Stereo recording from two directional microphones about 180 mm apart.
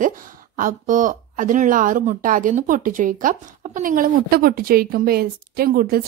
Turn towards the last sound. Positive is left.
turn(degrees=-55)  # may be behind; listen again after turning